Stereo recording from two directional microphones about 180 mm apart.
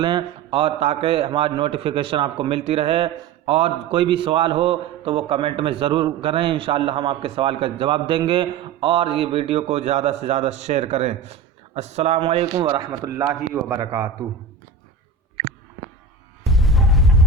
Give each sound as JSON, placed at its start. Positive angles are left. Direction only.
{"t": 0.0, "sound": "a man's voice", "side_deg": -25}
{"t": 12.5, "sound": "a man's voice", "side_deg": -20}
{"t": 16.4, "sound": "music", "side_deg": 0}